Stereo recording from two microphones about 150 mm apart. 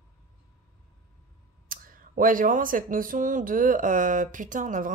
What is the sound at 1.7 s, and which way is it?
Speech, 70° right (ahead or behind).